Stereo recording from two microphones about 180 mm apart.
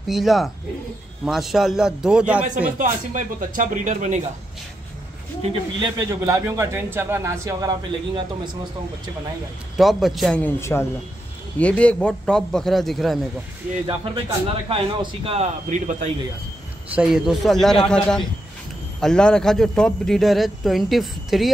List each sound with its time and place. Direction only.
0.0 s speech: centre (ahead or behind)
2.8 s speech: 45° right (ahead or behind)
5.4 s a man's voice: 25° right (ahead or behind)
9.8 s speech: centre (ahead or behind)
13.8 s a man's voice: 30° right (ahead or behind)
16.9 s speech: 5° right (ahead or behind)